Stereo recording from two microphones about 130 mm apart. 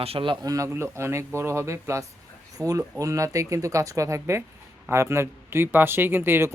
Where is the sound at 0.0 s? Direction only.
45° right (ahead or behind).